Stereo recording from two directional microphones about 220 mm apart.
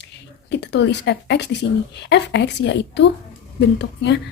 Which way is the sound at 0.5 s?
50° left (ahead or behind).